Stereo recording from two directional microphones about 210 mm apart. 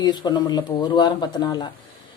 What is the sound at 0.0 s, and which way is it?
A woman's voice, 20° left (ahead or behind).